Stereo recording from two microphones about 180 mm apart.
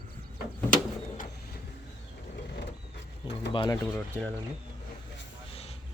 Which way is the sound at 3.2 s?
25° left (ahead or behind).